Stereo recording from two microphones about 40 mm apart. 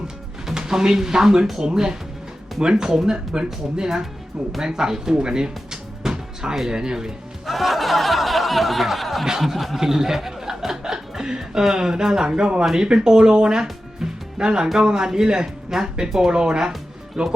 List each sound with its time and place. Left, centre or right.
0.5 s speech: centre
7.4 s a sound: centre
9.5 s speech: centre